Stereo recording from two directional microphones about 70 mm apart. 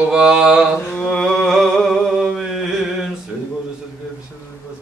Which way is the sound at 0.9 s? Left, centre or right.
Centre.